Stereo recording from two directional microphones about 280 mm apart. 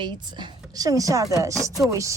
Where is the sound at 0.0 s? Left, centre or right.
Centre.